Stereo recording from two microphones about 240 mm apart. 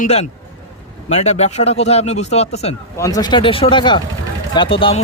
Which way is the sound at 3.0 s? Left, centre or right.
Centre.